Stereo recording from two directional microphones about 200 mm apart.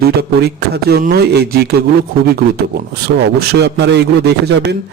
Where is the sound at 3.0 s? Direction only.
55° right (ahead or behind).